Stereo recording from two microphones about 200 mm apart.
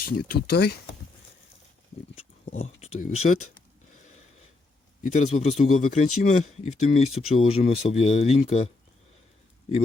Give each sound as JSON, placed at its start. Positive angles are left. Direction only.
{"t": 0.0, "sound": "speech", "side_deg": 45}
{"t": 2.1, "sound": "speech", "side_deg": 35}
{"t": 5.0, "sound": "speech", "side_deg": 35}